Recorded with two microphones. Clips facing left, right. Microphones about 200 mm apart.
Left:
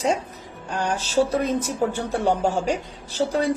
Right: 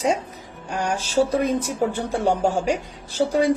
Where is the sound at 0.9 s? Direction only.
10° right (ahead or behind).